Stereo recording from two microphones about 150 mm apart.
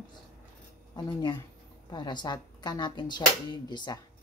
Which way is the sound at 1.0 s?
25° left (ahead or behind).